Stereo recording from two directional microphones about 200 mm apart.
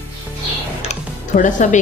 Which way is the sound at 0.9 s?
40° left (ahead or behind).